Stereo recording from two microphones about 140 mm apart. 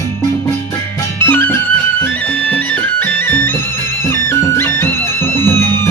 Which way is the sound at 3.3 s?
15° left (ahead or behind).